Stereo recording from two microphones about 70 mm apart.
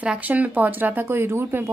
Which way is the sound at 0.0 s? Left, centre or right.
Centre.